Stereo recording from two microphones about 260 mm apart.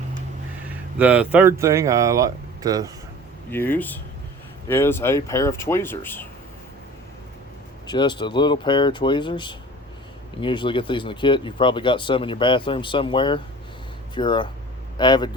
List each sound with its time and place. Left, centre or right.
0.9 s speech: centre
3.5 s speech: centre
7.9 s speech: centre